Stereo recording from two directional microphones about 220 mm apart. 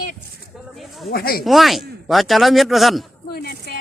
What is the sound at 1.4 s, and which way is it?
A man's voice, centre (ahead or behind).